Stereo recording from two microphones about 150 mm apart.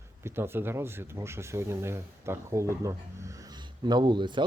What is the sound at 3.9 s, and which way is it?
Speech, 30° right (ahead or behind).